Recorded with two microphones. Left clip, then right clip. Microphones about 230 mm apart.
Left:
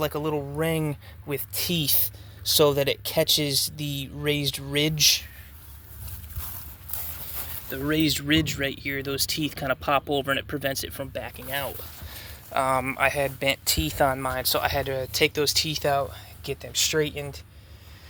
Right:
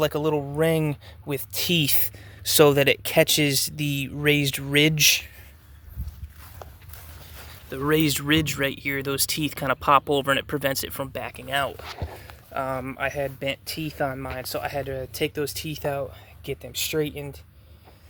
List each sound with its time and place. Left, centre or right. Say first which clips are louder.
0.0 s speech: right 4 dB; right
7.7 s speech: right 2 dB; right
12.5 s speech: left 5 dB; centre; by 17.4 s right